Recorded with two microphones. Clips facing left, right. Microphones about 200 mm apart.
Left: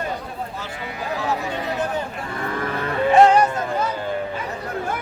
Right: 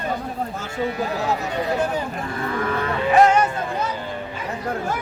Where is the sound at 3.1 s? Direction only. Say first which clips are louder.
Left 2 dB; 30° left (ahead or behind).